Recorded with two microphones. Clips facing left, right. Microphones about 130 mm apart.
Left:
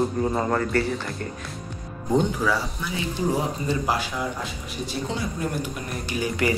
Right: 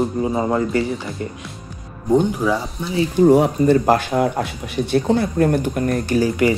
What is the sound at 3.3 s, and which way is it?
Speech, 60° right (ahead or behind).